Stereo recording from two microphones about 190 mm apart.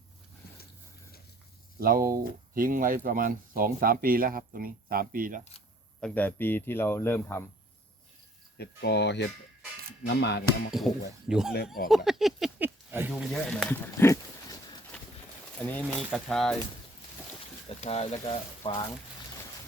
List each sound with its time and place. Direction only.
1.8 s speech: 50° right (ahead or behind)
6.0 s speech: 5° left (ahead or behind)
8.5 s speech: 60° left (ahead or behind)
10.7 s speech: centre (ahead or behind)
11.9 s a sound: centre (ahead or behind); by 14.8 s 15° left (ahead or behind)
15.6 s speech: 5° left (ahead or behind)
17.7 s speech: 35° left (ahead or behind)
18.1 s frying: 30° left (ahead or behind)